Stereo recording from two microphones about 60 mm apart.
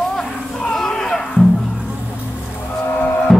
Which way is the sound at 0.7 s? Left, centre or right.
Centre.